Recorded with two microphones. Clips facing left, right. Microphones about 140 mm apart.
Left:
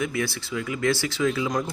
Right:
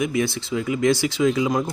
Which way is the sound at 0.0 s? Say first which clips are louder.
Right 5 dB; 20° right (ahead or behind).